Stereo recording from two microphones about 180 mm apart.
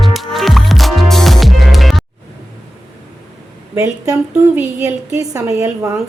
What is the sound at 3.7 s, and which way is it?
A woman's voice, 15° right (ahead or behind).